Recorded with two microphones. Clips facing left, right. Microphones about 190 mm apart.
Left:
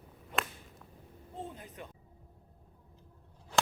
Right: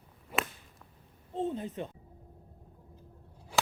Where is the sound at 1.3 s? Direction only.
25° right (ahead or behind).